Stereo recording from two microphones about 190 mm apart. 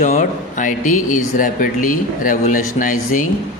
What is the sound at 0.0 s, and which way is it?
A man's voice, 45° left (ahead or behind).